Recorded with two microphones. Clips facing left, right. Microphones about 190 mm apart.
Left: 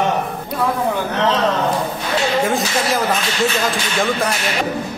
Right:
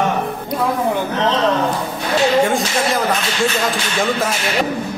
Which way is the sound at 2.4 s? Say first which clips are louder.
Right 1 dB; centre (ahead or behind).